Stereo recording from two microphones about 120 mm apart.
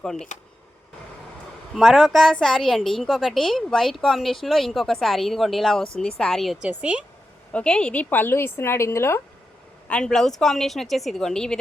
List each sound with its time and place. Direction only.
0.0 s a woman's voice: 5° left (ahead or behind)
1.7 s a woman's voice: centre (ahead or behind)
6.7 s speech: 10° right (ahead or behind)
7.5 s a woman's voice: 10° left (ahead or behind)
9.9 s a woman's voice: 5° left (ahead or behind)